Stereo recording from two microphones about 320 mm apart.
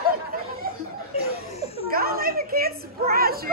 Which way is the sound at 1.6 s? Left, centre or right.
Right.